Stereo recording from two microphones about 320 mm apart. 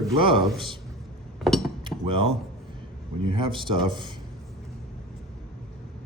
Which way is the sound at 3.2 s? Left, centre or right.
Centre.